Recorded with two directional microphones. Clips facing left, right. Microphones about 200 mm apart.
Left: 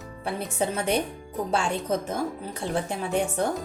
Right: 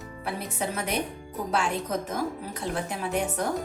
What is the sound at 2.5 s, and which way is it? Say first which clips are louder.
Speech: left 5 dB; 25° left (ahead or behind).